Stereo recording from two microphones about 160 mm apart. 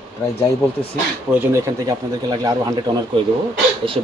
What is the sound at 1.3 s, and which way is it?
Speech, 15° right (ahead or behind).